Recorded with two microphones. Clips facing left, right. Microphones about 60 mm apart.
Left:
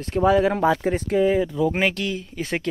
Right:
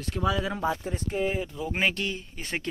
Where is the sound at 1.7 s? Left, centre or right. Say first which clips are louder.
Left 5 dB; left.